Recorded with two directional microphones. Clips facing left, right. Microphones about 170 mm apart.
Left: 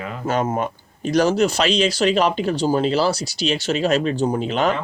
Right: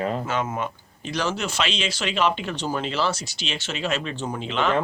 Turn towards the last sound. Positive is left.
turn(degrees=40)  # may be behind; listen again after turning